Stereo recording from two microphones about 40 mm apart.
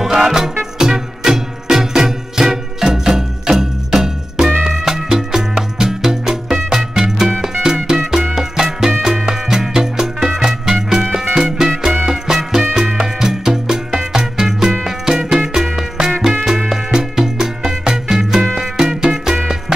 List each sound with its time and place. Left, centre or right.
0.0 s music: centre